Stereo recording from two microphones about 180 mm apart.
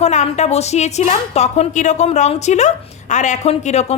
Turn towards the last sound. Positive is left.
turn(degrees=40)  # may be behind; listen again after turning